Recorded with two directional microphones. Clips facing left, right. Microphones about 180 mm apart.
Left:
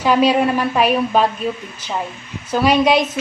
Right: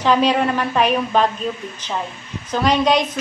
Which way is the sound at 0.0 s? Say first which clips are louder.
Left 2 dB; 10° left (ahead or behind).